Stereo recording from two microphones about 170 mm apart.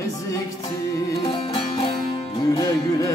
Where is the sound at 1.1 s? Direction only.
25° left (ahead or behind).